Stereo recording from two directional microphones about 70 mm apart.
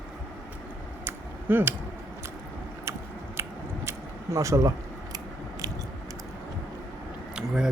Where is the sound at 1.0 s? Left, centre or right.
Right.